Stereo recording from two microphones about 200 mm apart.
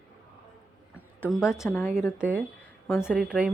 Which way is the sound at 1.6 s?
10° left (ahead or behind).